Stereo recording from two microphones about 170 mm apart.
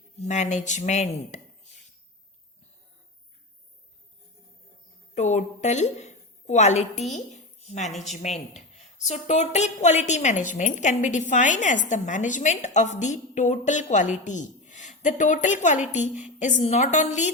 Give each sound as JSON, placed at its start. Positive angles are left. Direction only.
{"t": 0.2, "sound": "a woman's voice", "side_deg": 45}
{"t": 5.1, "sound": "a woman's voice", "side_deg": 45}